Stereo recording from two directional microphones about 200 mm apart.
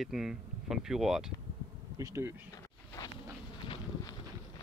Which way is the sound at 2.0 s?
15° right (ahead or behind).